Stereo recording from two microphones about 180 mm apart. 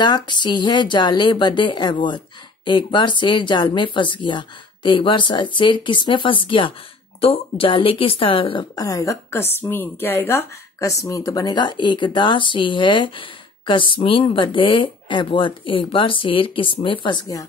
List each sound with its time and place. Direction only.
0.0 s speech: 25° left (ahead or behind)